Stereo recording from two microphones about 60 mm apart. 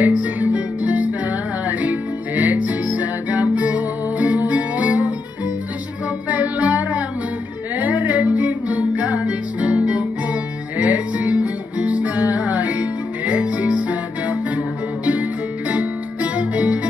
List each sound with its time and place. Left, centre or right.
0.0 s music: right
6.2 s music: right
15.7 s music: centre